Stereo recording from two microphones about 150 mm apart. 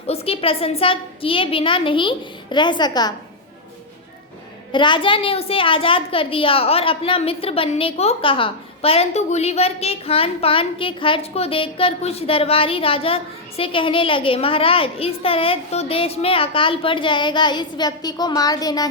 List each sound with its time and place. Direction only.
0.1 s a child's voice: 40° left (ahead or behind)
4.7 s a child's voice: 30° left (ahead or behind)